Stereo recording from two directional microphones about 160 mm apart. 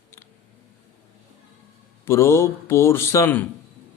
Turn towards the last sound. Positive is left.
turn(degrees=15)  # may be behind; listen again after turning